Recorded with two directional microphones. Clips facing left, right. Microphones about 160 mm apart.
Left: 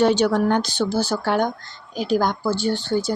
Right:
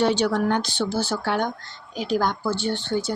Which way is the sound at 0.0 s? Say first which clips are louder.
Left 3 dB; 45° left (ahead or behind).